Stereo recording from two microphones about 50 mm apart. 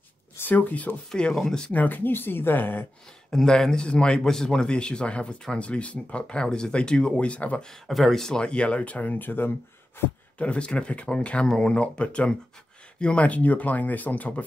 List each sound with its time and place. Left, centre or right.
0.5 s speech: left
1.1 s speech: centre
1.7 s speech: left
3.3 s speech: centre; by 7.6 s left
7.8 s speech: centre
8.4 s speech: left
10.4 s speech: left